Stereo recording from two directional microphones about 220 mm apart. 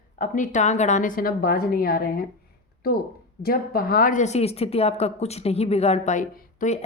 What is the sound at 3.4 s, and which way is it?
Speech, 40° left (ahead or behind).